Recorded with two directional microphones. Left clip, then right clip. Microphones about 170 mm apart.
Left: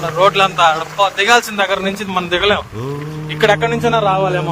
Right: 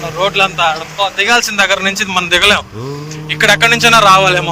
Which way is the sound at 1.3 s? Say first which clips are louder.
Right 2 dB; 20° left (ahead or behind).